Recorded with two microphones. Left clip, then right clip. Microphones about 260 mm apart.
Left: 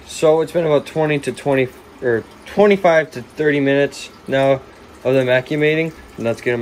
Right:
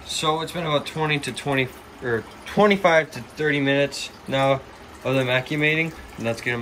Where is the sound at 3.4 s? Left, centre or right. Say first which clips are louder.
Left 5 dB; centre.